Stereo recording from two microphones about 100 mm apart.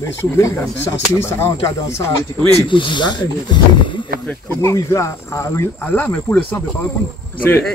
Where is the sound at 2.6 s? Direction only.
55° left (ahead or behind).